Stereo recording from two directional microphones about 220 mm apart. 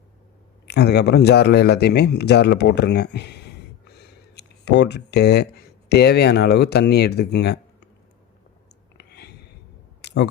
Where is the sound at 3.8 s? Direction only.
50° left (ahead or behind).